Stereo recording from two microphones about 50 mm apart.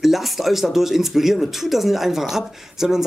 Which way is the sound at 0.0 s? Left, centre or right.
Centre.